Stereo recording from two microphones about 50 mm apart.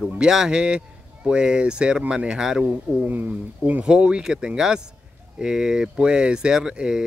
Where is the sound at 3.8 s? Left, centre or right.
Centre.